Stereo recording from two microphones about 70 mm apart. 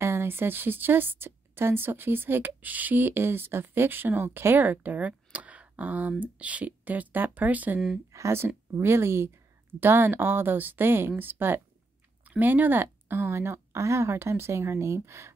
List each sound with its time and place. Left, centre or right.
0.0 s a woman's voice: right
8.1 s speech: right